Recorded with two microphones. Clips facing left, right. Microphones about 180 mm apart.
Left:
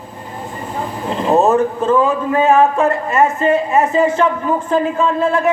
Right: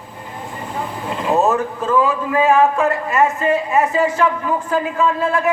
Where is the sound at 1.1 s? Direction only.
35° left (ahead or behind).